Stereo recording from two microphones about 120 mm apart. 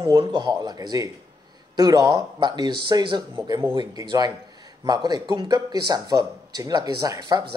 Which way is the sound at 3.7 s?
35° right (ahead or behind).